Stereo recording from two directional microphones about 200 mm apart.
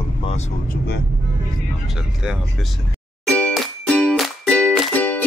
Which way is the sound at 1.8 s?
5° right (ahead or behind).